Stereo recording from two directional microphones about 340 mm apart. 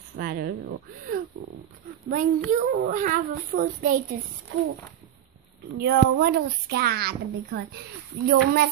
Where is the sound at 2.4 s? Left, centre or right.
Right.